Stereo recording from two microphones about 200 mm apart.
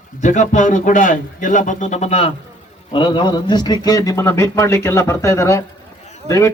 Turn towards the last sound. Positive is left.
turn(degrees=15)  # may be behind; listen again after turning